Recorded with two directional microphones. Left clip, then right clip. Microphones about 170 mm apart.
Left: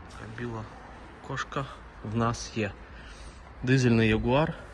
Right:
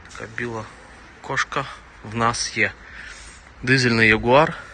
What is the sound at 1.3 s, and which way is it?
A man's voice, 10° left (ahead or behind).